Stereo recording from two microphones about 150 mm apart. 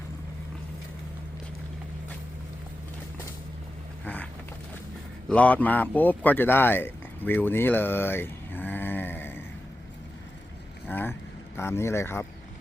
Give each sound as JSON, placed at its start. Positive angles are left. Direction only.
{"t": 4.0, "sound": "vehicle", "side_deg": 10}
{"t": 5.3, "sound": "speech", "side_deg": 10}
{"t": 10.8, "sound": "vehicle", "side_deg": 15}
{"t": 11.5, "sound": "speech", "side_deg": 15}